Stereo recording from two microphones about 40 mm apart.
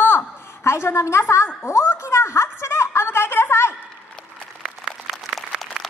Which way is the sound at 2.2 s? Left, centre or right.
Left.